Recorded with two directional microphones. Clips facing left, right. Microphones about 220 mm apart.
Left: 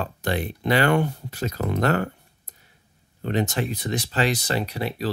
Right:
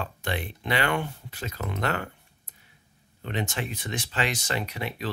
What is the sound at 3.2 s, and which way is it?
Speech, 40° left (ahead or behind).